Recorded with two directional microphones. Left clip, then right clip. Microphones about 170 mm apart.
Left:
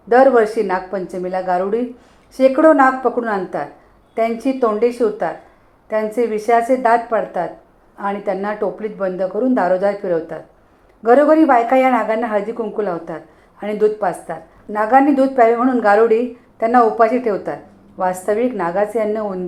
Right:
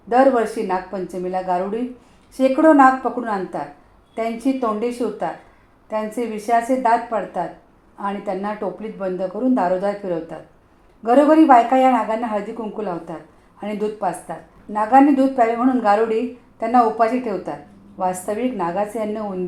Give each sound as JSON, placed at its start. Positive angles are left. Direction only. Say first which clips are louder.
{"t": 0.1, "sound": "speech", "louder": "left 4 dB", "side_deg": 25}